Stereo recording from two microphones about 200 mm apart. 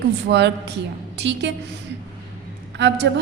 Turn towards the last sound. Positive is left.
turn(degrees=-60)  # may be behind; listen again after turning